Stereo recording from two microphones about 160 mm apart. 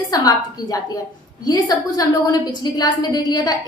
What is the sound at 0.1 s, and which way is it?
A woman's voice, 25° left (ahead or behind).